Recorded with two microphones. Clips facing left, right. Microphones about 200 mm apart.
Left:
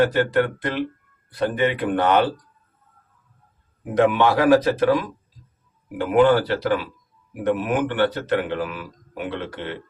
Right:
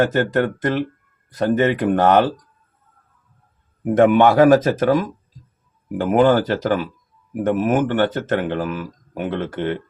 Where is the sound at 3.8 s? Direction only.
50° right (ahead or behind).